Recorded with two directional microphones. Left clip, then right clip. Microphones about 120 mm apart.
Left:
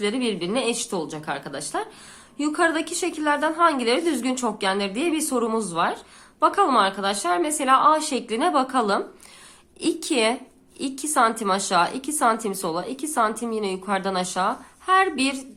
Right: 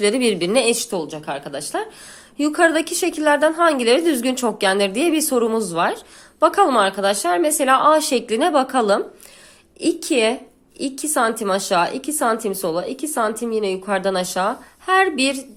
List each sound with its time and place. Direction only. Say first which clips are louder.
0.0 s a woman's voice: right 7 dB; 50° right (ahead or behind)
1.1 s speech: right 3 dB; 15° right (ahead or behind)
2.4 s a woman's voice: right 5 dB; 40° right (ahead or behind)
9.8 s a woman's voice: right 4 dB; 20° right (ahead or behind)